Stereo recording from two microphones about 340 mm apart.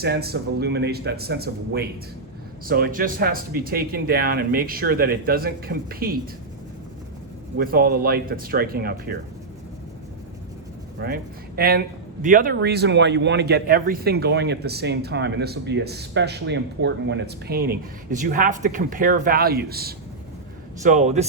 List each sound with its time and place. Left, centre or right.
0.0 s a man's voice: right
7.5 s a man's voice: right
11.0 s a man's voice: right